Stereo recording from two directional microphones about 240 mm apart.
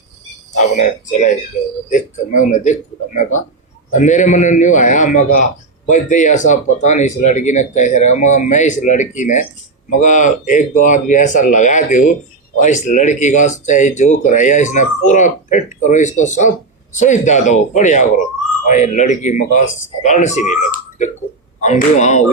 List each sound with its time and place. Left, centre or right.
0.5 s a man's voice: left